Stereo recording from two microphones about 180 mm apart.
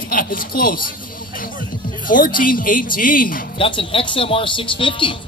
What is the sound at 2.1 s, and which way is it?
Speech, 50° left (ahead or behind).